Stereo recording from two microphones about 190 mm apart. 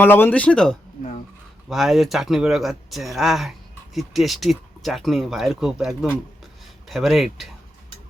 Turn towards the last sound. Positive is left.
turn(degrees=0)  # may be behind; listen again after turning